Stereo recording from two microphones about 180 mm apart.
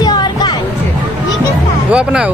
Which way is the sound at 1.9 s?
5° right (ahead or behind).